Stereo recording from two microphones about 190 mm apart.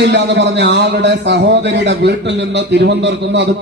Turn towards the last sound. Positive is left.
turn(degrees=-70)  # may be behind; listen again after turning